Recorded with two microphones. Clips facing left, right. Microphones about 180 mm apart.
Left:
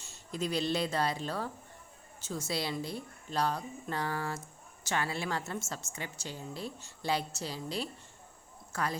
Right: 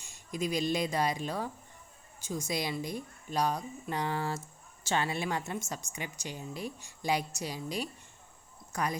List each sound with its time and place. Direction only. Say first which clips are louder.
0.0 s a woman's voice: right 1 dB; 15° right (ahead or behind)